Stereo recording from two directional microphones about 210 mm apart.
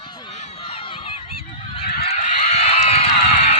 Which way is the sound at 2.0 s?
30° left (ahead or behind).